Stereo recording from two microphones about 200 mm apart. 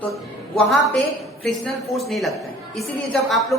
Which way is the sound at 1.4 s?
Centre (ahead or behind).